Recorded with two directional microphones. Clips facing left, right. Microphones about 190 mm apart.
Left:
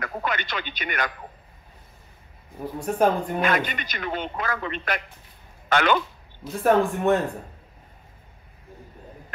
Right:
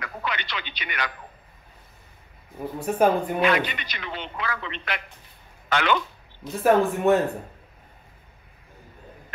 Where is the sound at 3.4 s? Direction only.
45° left (ahead or behind).